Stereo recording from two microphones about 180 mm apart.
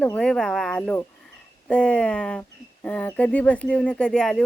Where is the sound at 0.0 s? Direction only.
5° left (ahead or behind).